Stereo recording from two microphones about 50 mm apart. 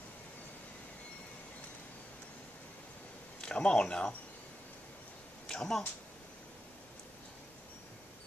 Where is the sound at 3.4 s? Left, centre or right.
Centre.